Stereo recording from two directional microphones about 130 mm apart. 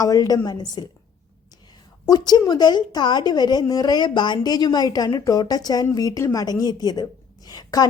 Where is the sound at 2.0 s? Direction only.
30° left (ahead or behind).